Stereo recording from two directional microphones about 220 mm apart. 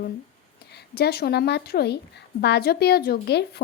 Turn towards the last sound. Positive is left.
turn(degrees=50)  # may be behind; listen again after turning